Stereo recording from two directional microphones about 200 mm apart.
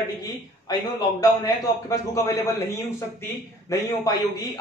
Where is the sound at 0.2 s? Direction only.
20° left (ahead or behind).